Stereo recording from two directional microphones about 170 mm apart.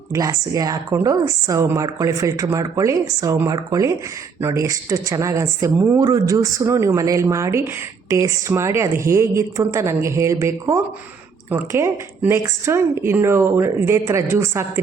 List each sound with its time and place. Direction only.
0.1 s speech: 20° right (ahead or behind)